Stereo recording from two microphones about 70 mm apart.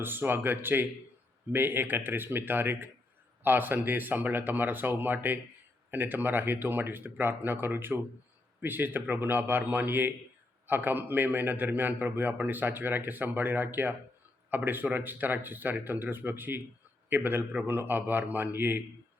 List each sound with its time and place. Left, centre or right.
0.0 s a man's voice: right